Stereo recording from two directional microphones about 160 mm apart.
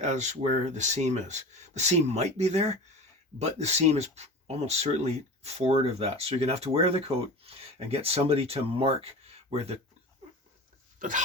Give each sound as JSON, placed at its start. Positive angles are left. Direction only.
{"t": 0.0, "sound": "speech", "side_deg": -45}
{"t": 11.0, "sound": "speech", "side_deg": -60}